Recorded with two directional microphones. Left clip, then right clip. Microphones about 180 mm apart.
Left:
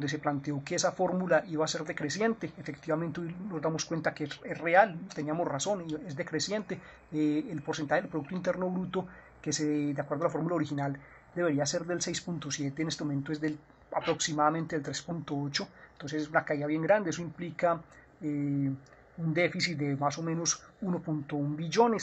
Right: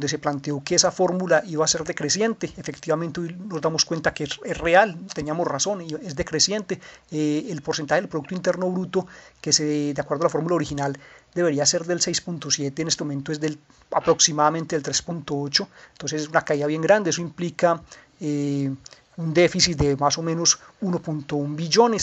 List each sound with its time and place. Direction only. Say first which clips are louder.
0.1 s speech: right 7 dB; 25° right (ahead or behind)